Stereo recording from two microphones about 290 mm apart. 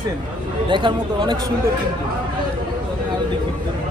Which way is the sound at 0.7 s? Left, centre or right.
Centre.